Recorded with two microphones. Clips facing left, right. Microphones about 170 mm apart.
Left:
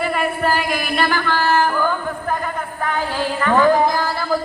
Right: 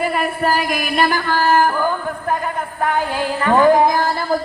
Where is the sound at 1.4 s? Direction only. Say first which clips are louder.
Right 3 dB; 45° right (ahead or behind).